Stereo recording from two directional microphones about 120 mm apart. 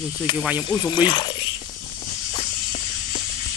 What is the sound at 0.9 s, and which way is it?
Speech, 40° left (ahead or behind).